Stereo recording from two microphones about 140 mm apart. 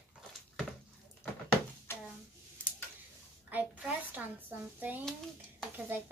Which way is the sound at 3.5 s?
10° right (ahead or behind).